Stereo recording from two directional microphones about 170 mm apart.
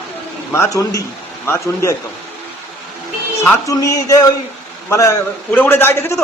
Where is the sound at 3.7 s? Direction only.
20° left (ahead or behind).